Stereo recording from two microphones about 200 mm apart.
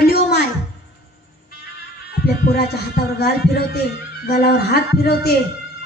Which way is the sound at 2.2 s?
50° left (ahead or behind).